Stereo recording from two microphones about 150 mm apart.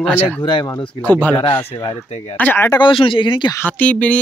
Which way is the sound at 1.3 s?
35° left (ahead or behind).